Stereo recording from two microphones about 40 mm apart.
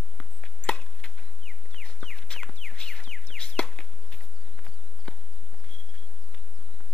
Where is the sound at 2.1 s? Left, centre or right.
Centre.